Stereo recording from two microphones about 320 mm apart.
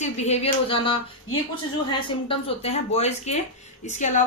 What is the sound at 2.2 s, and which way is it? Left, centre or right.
Speech, centre.